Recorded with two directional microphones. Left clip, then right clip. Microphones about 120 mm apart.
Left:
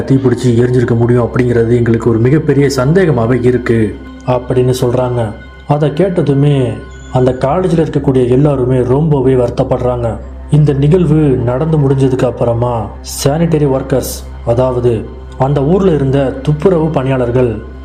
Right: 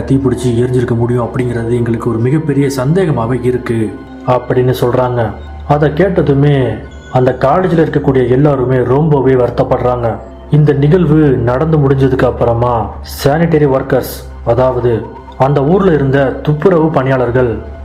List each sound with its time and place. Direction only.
0.1 s speech: 25° left (ahead or behind)